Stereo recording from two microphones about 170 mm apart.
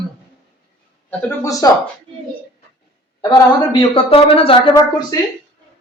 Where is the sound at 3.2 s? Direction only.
25° left (ahead or behind).